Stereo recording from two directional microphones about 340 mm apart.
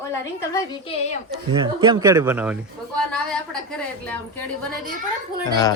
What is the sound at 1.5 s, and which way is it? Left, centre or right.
Speech, centre.